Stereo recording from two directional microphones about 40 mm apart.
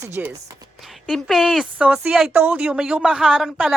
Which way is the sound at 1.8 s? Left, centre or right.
Right.